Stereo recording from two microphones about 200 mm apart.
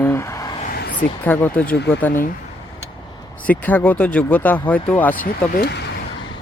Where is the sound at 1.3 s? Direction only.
10° left (ahead or behind).